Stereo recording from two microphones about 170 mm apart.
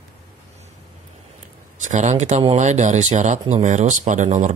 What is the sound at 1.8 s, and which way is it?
Speech, 45° right (ahead or behind).